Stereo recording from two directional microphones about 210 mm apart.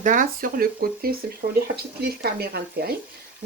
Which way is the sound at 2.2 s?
50° right (ahead or behind).